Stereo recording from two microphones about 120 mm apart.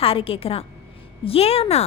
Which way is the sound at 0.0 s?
50° left (ahead or behind).